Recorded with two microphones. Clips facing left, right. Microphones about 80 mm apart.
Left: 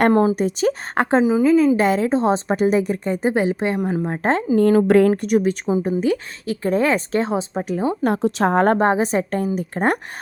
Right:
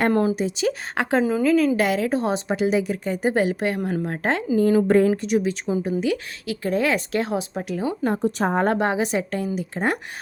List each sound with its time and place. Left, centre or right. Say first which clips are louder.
0.1 s a woman's voice: left 4 dB; left
0.3 s a woman's voice: left 4 dB; left
1.2 s a woman's voice: left 5 dB; centre
1.5 s a woman's voice: left 3 dB; left
2.5 s a woman's voice: left 3 dB; left
3.2 s a woman's voice: left 1 dB; left
4.5 s a woman's voice: left 3 dB; left
4.9 s speech: left 3 dB; left
5.1 s speech: left 4 dB; left
6.0 s a woman's voice: left 3 dB; left
8.0 s a woman's voice: left 3 dB; left
8.8 s a woman's voice: left 4 dB; left